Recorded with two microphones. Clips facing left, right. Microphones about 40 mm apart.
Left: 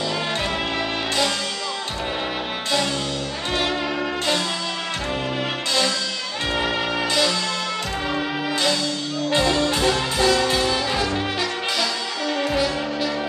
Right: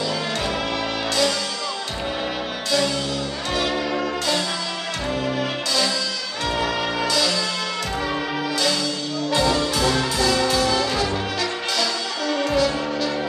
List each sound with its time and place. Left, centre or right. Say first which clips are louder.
3.5 s music: even; left
6.6 s music: even; left
9.3 s music: left 1 dB; left
11.8 s music: even; centre